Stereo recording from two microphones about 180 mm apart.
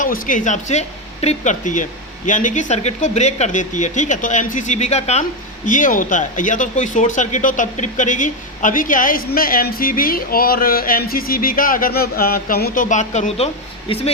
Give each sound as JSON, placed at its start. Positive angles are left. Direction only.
{"t": 0.0, "sound": "speech", "side_deg": 45}